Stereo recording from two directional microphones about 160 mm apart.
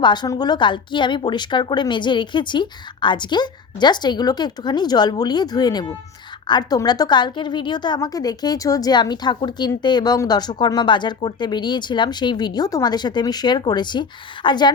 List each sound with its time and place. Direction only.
0.0 s a woman's voice: 30° left (ahead or behind)